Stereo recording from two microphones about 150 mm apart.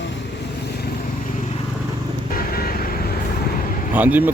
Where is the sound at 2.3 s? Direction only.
85° left.